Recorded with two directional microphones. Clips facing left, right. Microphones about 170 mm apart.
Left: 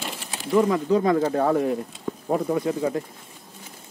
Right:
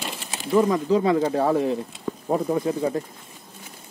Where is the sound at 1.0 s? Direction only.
10° right (ahead or behind).